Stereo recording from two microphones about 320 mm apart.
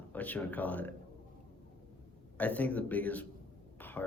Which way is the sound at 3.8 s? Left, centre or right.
Centre.